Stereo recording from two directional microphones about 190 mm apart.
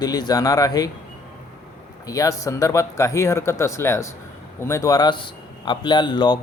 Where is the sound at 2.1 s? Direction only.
15° left (ahead or behind).